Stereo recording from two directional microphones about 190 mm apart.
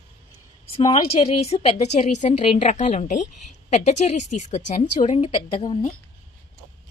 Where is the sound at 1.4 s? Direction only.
35° left (ahead or behind).